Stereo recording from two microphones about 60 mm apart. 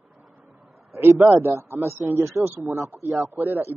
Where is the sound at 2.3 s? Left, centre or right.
Centre.